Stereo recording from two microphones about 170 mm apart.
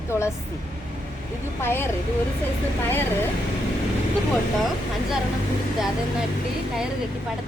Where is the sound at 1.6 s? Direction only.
15° left (ahead or behind).